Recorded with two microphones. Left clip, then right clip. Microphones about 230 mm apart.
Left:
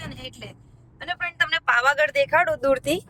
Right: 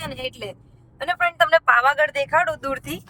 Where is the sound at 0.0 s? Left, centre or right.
Right.